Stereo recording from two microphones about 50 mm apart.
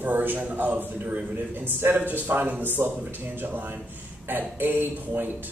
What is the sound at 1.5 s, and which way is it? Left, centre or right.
Speech, right.